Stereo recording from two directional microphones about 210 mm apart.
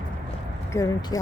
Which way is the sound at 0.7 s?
15° left (ahead or behind).